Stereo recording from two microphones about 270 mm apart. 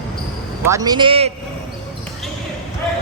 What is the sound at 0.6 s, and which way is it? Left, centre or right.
Speech, centre.